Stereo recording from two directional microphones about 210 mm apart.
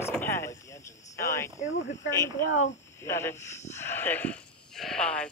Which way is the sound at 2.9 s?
15° left (ahead or behind).